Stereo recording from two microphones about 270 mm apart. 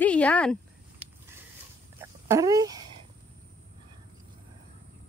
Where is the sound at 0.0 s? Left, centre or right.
Centre.